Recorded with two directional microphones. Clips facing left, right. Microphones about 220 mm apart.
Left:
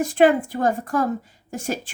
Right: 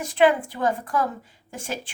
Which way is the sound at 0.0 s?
45° left (ahead or behind).